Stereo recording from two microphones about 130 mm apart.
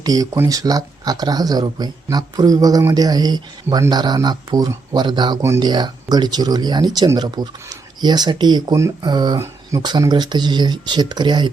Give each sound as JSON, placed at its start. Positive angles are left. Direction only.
{"t": 0.0, "sound": "speech", "side_deg": -30}